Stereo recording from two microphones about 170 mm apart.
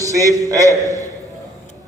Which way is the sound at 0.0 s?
20° right (ahead or behind).